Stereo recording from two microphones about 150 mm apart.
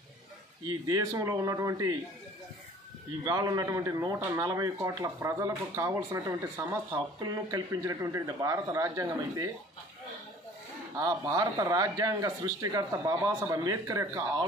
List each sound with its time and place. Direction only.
0.7 s a man's voice: 25° right (ahead or behind)
3.3 s a man's voice: 25° right (ahead or behind)
11.0 s a man's voice: 25° right (ahead or behind)